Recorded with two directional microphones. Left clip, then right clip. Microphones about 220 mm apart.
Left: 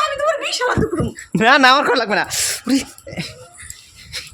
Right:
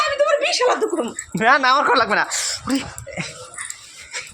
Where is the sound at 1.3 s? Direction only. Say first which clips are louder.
Left 4 dB; 35° left (ahead or behind).